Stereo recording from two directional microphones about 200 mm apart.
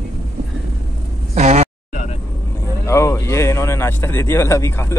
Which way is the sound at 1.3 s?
35° right (ahead or behind).